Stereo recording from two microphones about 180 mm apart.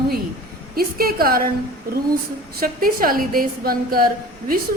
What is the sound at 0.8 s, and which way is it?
Speech, 55° right (ahead or behind).